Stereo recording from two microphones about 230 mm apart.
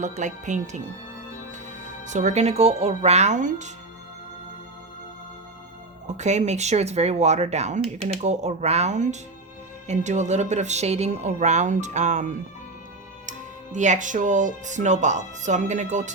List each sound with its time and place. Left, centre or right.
0.0 s speech: right
2.0 s speech: right
6.1 s speech: right
13.7 s speech: right